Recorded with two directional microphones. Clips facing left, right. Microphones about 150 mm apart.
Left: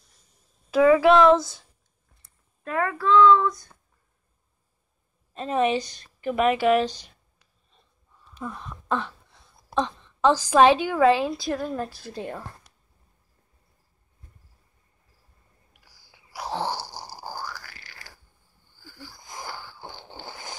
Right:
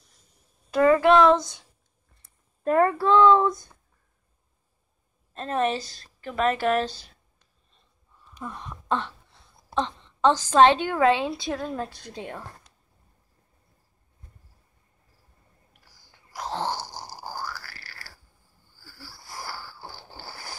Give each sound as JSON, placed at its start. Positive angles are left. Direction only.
{"t": 0.7, "sound": "a woman's voice", "side_deg": 5}
{"t": 2.6, "sound": "speech", "side_deg": -40}
{"t": 5.3, "sound": "a woman's voice", "side_deg": 10}
{"t": 8.4, "sound": "a woman's voice", "side_deg": 0}
{"t": 15.8, "sound": "a sound", "side_deg": 10}
{"t": 18.8, "sound": "wheeze", "side_deg": 20}